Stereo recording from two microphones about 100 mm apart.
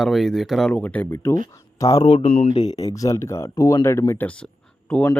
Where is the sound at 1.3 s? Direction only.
35° left (ahead or behind).